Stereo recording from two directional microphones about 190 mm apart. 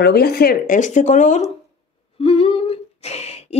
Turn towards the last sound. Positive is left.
turn(degrees=35)  # may be behind; listen again after turning